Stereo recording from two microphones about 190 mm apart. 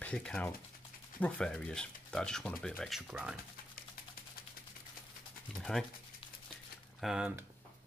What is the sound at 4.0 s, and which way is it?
Typing, 50° left (ahead or behind).